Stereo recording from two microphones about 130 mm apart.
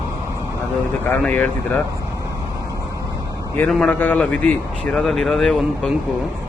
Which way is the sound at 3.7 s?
5° left (ahead or behind).